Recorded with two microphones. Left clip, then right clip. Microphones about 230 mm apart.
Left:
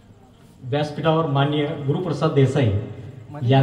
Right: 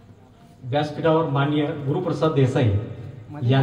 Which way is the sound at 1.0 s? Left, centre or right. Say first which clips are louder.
Even; left.